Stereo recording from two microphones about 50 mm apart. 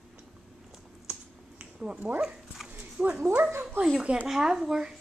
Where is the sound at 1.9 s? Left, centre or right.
Right.